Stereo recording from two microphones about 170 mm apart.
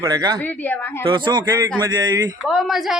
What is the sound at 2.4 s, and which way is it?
Speech, centre (ahead or behind).